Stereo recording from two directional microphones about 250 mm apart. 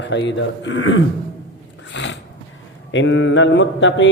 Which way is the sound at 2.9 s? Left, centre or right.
Left.